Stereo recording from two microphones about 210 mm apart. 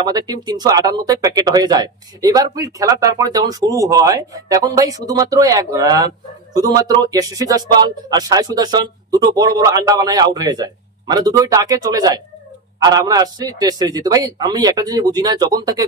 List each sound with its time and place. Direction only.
0.0 s speech: 20° right (ahead or behind)